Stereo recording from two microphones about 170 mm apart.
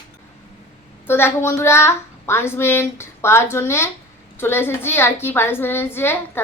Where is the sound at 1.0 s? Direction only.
15° left (ahead or behind).